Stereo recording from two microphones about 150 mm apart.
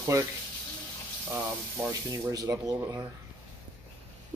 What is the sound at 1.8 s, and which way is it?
Speech, 20° right (ahead or behind).